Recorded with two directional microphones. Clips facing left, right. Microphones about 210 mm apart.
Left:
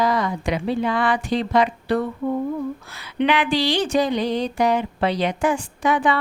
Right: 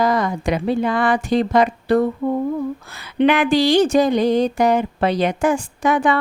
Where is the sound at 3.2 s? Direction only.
45° right (ahead or behind).